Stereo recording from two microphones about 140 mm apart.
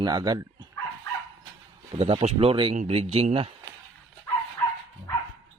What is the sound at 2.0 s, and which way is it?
Speech, 45° right (ahead or behind).